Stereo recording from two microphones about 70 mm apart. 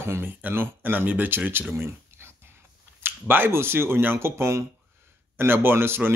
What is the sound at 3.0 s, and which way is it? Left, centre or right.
Speech, right.